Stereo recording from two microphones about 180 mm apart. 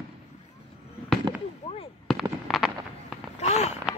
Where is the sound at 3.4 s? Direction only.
40° left (ahead or behind).